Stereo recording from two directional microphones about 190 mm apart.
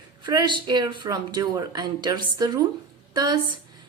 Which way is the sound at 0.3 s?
25° right (ahead or behind).